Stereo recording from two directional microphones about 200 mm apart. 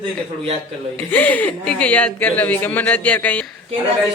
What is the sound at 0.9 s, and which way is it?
Speech, 10° left (ahead or behind).